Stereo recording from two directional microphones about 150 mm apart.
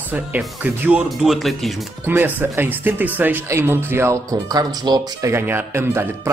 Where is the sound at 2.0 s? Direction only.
15° right (ahead or behind).